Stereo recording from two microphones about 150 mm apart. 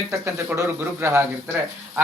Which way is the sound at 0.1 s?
20° right (ahead or behind).